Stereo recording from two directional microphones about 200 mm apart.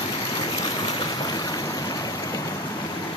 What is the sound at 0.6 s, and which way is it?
Boat, 20° left (ahead or behind).